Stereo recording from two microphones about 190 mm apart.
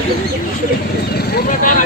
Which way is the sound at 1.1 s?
55° left (ahead or behind).